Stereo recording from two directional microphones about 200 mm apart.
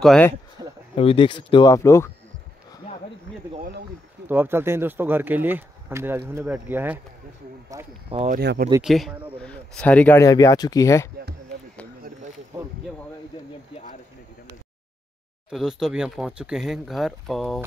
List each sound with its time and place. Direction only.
0.0 s speech: 5° left (ahead or behind)
0.6 s a sound: 20° right (ahead or behind)
0.9 s speech: 25° left (ahead or behind)
4.3 s speech: 10° right (ahead or behind)
8.1 s speech: 35° right (ahead or behind)
8.4 s speech: 55° right (ahead or behind)
8.8 s speech: centre (ahead or behind); by 11.1 s 15° left (ahead or behind)
15.5 s speech: centre (ahead or behind)